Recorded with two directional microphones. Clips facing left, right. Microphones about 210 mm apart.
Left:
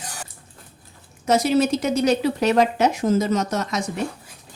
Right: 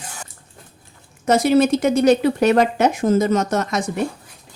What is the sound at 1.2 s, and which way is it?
Speech, 55° right (ahead or behind).